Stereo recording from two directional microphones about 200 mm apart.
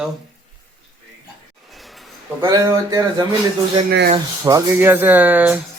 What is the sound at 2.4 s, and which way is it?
Speech, 15° right (ahead or behind).